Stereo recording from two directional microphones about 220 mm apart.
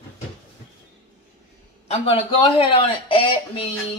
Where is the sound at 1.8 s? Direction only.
25° left (ahead or behind).